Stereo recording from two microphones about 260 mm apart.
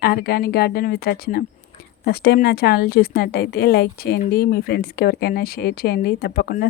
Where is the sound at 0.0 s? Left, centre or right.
Left.